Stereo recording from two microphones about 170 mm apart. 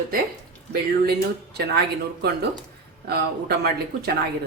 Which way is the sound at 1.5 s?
75° right (ahead or behind).